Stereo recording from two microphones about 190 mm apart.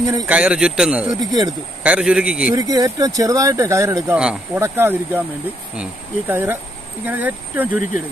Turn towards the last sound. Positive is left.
turn(degrees=-10)  # may be behind; listen again after turning